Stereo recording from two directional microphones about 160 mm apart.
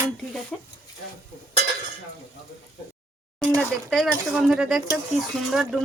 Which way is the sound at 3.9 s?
Centre (ahead or behind).